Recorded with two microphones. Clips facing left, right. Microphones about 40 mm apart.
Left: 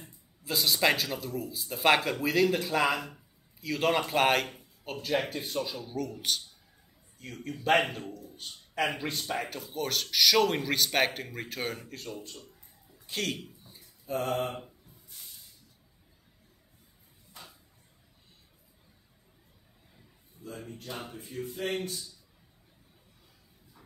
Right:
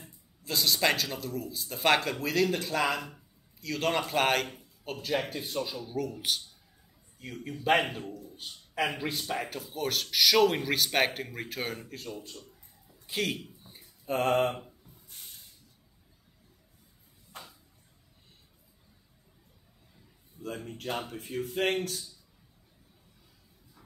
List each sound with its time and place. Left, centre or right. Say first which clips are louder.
0.0 s a man's voice: left 1 dB; centre
14.0 s speech: right 4 dB; right
17.3 s a sound: right 3 dB; right
20.4 s speech: right 4 dB; right
20.7 s speech: right 5 dB; right